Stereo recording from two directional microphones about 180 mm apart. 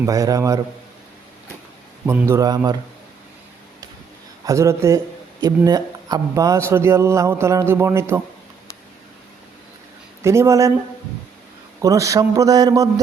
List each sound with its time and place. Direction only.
0.0 s a man's voice: 20° right (ahead or behind)
2.0 s a man's voice: 15° right (ahead or behind)
4.4 s a man's voice: 15° right (ahead or behind)
10.2 s a man's voice: 15° right (ahead or behind)
11.8 s a man's voice: 20° right (ahead or behind)